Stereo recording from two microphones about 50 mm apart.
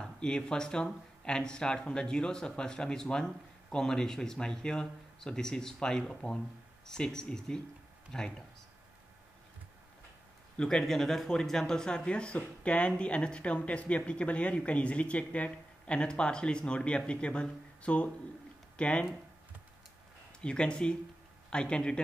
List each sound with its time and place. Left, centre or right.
0.0 s speech: centre
10.6 s speech: centre
20.3 s speech: centre